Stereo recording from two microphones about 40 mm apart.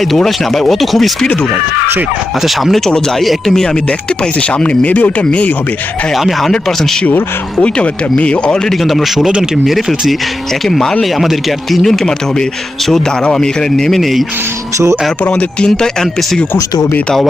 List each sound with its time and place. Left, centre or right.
0.0 s speech: centre
2.4 s speech: centre
2.8 s a man's voice: centre
3.8 s speech: left
6.1 s speech: centre
7.6 s speech: left
8.7 s speech: centre
10.7 s a man's voice: centre
11.0 s a man's voice: centre
14.0 s speech: centre
15.4 s speech: left